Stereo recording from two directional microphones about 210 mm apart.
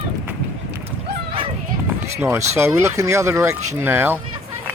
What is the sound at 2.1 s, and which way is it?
Speech, 10° right (ahead or behind).